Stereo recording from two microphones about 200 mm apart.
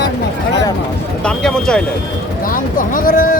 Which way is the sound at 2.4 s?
45° left (ahead or behind).